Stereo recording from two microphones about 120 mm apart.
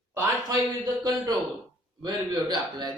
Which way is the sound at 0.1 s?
25° right (ahead or behind).